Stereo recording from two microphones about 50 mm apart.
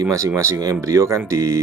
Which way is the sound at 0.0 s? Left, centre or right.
Right.